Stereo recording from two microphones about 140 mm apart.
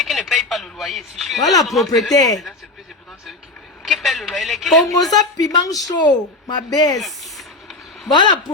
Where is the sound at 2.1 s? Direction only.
25° left (ahead or behind).